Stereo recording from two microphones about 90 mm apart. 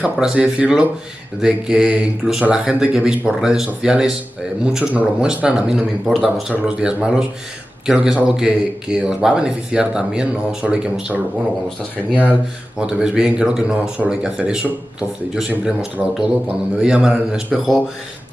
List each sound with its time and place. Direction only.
0.2 s a man's voice: 10° right (ahead or behind)
12.1 s speech: 15° left (ahead or behind)
12.8 s a man's voice: 10° right (ahead or behind)